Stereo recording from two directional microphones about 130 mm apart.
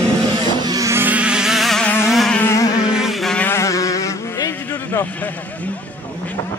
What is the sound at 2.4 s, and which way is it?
Insect, 20° left (ahead or behind).